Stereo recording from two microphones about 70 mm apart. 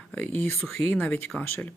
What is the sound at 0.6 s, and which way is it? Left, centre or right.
Speech, centre.